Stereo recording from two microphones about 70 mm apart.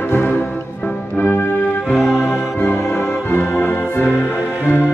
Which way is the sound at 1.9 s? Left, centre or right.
Centre.